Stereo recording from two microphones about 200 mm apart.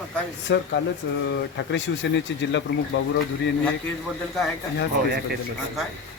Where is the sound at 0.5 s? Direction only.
65° left (ahead or behind).